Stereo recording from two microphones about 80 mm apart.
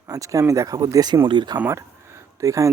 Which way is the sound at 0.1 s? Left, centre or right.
Right.